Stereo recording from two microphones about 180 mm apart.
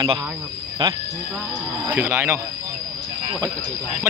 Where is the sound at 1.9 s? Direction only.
10° right (ahead or behind).